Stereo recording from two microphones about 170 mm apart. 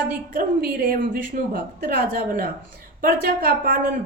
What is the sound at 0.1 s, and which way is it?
A woman's voice, 60° right (ahead or behind).